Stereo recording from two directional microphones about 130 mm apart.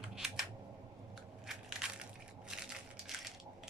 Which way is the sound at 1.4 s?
5° right (ahead or behind).